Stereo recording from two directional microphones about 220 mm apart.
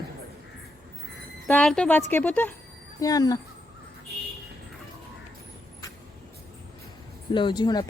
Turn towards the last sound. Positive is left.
turn(degrees=20)  # may be behind; listen again after turning